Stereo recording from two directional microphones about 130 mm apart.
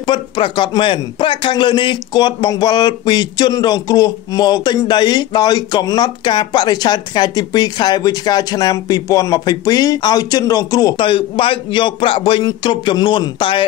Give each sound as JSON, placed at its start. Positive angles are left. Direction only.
{"t": 0.0, "sound": "a man's voice", "side_deg": 40}
{"t": 11.0, "sound": "a man's voice", "side_deg": 40}